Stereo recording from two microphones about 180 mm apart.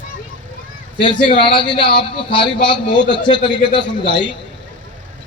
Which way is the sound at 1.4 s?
25° left (ahead or behind).